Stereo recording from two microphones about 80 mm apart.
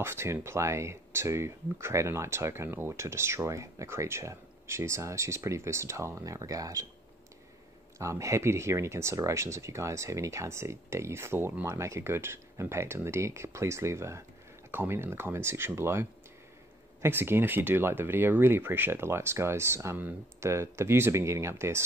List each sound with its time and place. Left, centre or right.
0.0 s speech: right
8.0 s speech: right